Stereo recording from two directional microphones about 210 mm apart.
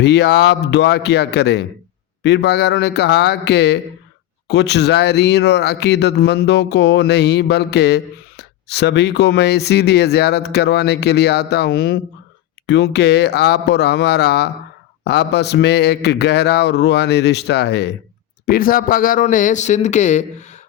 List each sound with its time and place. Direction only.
0.0 s speech: 55° left (ahead or behind)
18.4 s speech: 45° left (ahead or behind)